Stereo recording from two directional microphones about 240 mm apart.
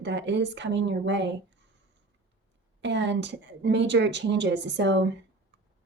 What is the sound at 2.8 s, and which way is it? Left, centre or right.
Speech, right.